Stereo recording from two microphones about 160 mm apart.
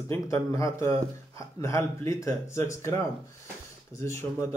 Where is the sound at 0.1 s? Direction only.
15° left (ahead or behind).